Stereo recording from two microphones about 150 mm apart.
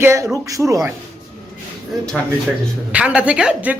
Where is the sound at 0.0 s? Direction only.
20° right (ahead or behind).